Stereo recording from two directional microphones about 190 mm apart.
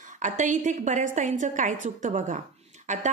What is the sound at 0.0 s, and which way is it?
A woman's voice, 40° right (ahead or behind).